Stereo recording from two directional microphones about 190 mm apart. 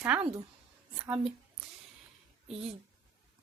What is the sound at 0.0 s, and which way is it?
Speech, 10° right (ahead or behind).